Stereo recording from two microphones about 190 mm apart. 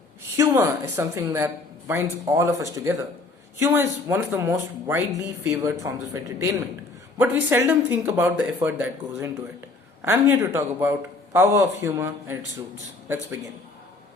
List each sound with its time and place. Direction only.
0.3 s speech: 15° right (ahead or behind)